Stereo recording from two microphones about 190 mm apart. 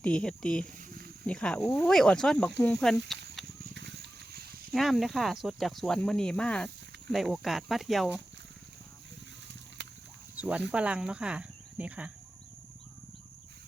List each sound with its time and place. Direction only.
0.0 s speech: 5° left (ahead or behind)
3.8 s a sound: 60° right (ahead or behind)
4.7 s speech: centre (ahead or behind)
10.3 s cricket: 5° right (ahead or behind)
10.7 s speech: 5° right (ahead or behind)